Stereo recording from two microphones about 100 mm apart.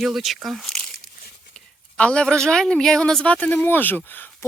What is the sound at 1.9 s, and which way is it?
Speech, 10° left (ahead or behind).